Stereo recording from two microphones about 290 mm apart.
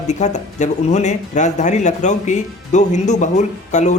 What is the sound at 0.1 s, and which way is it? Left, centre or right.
Speech, left.